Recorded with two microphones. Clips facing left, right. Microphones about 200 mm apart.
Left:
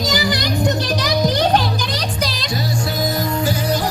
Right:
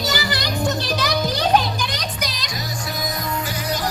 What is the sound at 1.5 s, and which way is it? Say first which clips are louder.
Music: left 1 dB; 35° left (ahead or behind).